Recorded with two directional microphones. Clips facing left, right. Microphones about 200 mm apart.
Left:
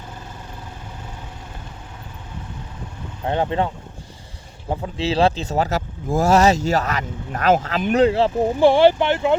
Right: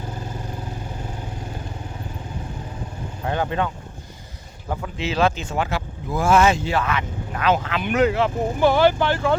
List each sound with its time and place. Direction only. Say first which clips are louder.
3.2 s speech: left 3 dB; 25° left (ahead or behind)
4.7 s speech: left 4 dB; 30° left (ahead or behind)